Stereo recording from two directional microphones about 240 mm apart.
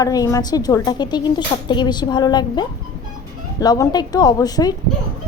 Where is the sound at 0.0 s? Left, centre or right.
Centre.